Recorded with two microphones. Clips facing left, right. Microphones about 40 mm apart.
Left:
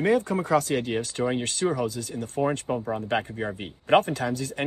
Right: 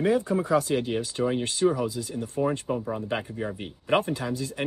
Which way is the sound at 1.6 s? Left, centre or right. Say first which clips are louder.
Right 3 dB; left.